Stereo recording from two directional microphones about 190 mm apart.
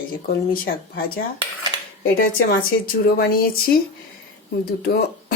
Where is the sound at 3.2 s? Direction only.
50° left (ahead or behind).